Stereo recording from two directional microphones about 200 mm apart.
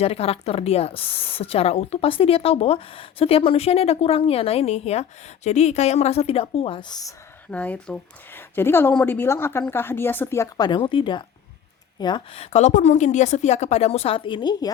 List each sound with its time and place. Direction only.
0.0 s speech: 30° left (ahead or behind)
7.5 s a woman's voice: 5° left (ahead or behind)